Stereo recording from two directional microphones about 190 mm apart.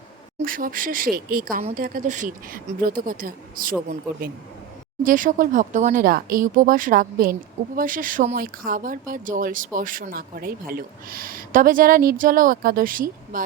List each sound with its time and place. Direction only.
0.4 s speech: 50° right (ahead or behind)